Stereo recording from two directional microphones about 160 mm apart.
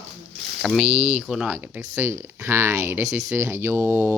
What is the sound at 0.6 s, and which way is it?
Speech, centre (ahead or behind).